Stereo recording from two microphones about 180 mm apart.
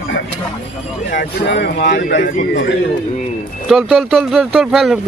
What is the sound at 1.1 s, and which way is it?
Speech, 60° left (ahead or behind).